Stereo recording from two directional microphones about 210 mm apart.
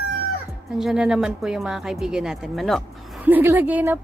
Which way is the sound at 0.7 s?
Centre (ahead or behind).